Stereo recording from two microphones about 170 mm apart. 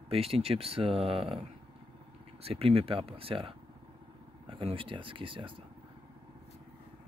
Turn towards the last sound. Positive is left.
turn(degrees=-30)  # may be behind; listen again after turning